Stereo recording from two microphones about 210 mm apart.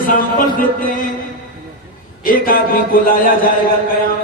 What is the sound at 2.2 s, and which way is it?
A man's voice, 40° left (ahead or behind).